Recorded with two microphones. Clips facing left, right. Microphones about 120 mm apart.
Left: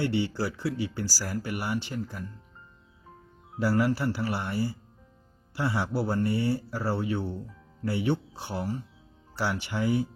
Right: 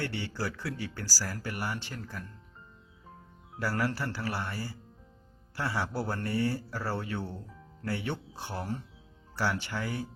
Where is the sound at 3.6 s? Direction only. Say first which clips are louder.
Left 6 dB; 15° left (ahead or behind).